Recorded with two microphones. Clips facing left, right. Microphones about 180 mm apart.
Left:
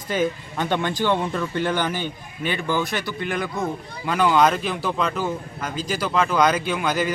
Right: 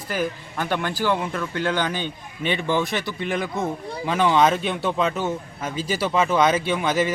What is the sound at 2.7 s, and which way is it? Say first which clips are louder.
A man's voice: right 1 dB; centre (ahead or behind).